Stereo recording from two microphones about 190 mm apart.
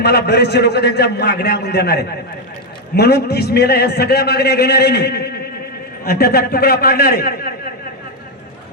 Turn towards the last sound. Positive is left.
turn(degrees=55)  # may be behind; listen again after turning